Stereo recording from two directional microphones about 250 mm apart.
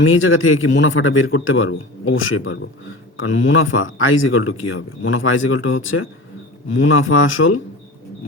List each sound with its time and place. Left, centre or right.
0.0 s speech: left